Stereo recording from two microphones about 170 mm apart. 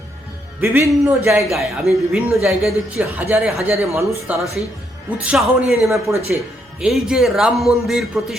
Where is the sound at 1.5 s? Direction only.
Centre (ahead or behind).